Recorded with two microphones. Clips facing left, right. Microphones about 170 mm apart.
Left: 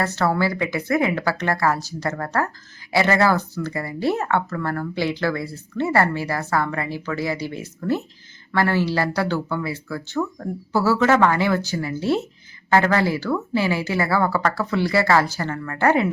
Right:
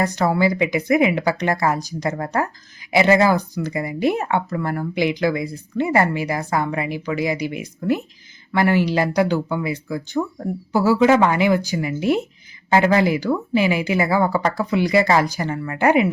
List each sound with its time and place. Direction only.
0.0 s speech: 15° right (ahead or behind)